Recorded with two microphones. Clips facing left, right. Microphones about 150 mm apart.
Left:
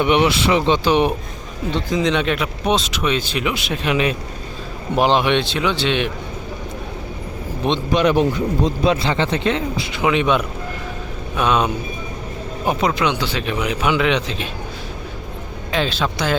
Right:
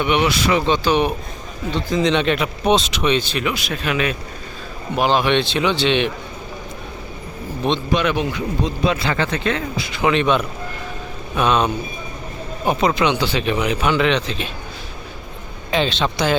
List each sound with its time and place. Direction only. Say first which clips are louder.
0.0 s speech: left 2 dB; 30° left (ahead or behind)
2.0 s speech: right 2 dB; 5° left (ahead or behind); by 5.2 s 25° left (ahead or behind)
5.2 s speech: right 1 dB; 5° left (ahead or behind)
7.9 s speech: left 4 dB; 35° left (ahead or behind)
8.9 s speech: left 2 dB; 25° left (ahead or behind)
10.0 s a man's voice: even; 10° left (ahead or behind)
15.7 s speech: right 1 dB; 5° left (ahead or behind)